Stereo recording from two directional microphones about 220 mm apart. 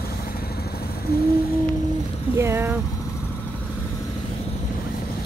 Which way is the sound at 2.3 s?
10° right (ahead or behind).